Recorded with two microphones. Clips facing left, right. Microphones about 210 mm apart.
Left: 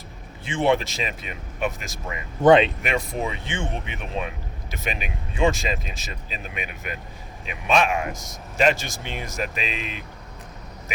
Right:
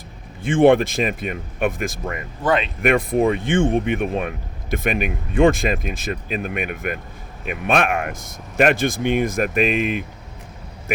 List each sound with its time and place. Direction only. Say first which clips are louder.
0.4 s speech: right 8 dB; 50° right (ahead or behind)
2.4 s speech: left 6 dB; 25° left (ahead or behind)
2.8 s speech: right 9 dB; 55° right (ahead or behind)